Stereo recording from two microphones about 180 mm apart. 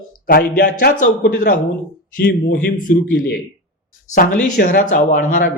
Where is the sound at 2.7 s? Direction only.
50° left (ahead or behind).